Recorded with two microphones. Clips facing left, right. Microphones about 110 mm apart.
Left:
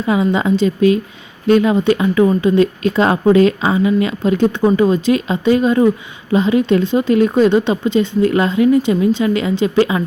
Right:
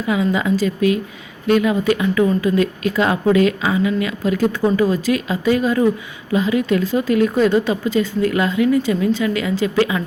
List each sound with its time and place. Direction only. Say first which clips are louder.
0.0 s speech: left 3 dB; 30° left (ahead or behind)